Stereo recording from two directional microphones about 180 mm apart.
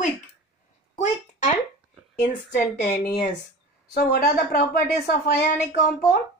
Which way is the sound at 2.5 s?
50° left (ahead or behind).